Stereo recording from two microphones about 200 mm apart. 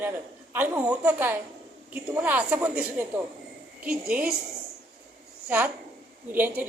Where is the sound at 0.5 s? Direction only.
10° right (ahead or behind).